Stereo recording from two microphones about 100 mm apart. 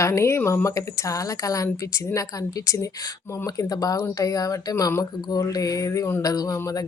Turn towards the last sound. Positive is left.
turn(degrees=35)  # may be behind; listen again after turning